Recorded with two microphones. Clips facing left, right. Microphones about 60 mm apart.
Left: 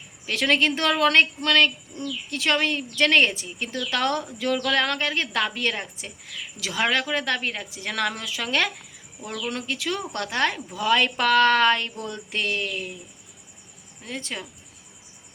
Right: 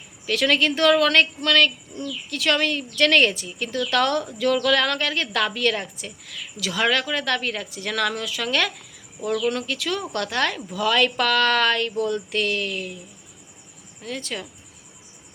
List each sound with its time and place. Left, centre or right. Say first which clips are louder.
0.3 s a woman's voice: right 1 dB; left
14.0 s a woman's voice: right 2 dB; left